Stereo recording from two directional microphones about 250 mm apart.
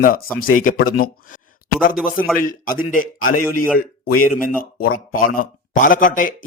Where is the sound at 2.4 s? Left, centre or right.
Left.